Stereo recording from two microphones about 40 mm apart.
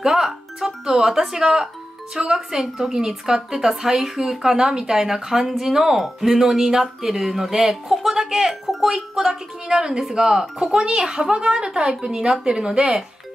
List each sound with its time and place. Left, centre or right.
0.0 s a woman's voice: centre